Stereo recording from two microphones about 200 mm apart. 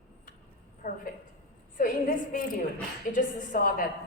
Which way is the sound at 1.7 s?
45° left (ahead or behind).